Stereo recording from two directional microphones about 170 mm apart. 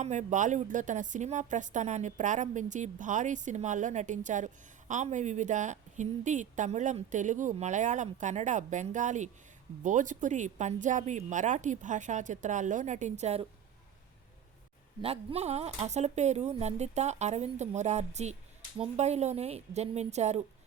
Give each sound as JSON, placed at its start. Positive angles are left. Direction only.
{"t": 0.0, "sound": "a woman's voice", "side_deg": -45}
{"t": 15.0, "sound": "speech", "side_deg": -35}